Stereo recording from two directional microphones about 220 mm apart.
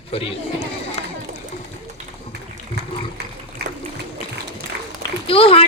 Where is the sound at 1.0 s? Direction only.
30° left (ahead or behind).